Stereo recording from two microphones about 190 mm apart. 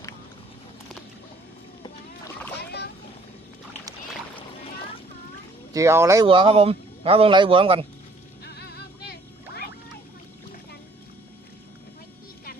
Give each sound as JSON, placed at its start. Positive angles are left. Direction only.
{"t": 1.8, "sound": "rowboat", "side_deg": 15}
{"t": 2.6, "sound": "boat", "side_deg": 60}
{"t": 5.7, "sound": "speech", "side_deg": -15}
{"t": 6.2, "sound": "a man's voice", "side_deg": -25}
{"t": 8.4, "sound": "vehicle", "side_deg": 55}